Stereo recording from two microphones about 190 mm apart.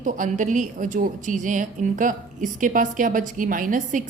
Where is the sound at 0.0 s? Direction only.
40° right (ahead or behind).